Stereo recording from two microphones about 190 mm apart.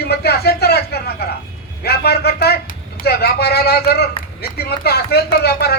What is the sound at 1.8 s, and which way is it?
A man's voice, 55° left (ahead or behind).